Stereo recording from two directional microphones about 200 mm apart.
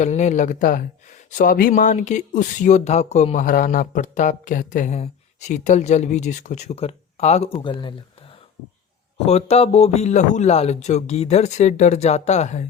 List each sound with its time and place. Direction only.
0.0 s speech: 35° left (ahead or behind)
9.1 s speech: 30° left (ahead or behind)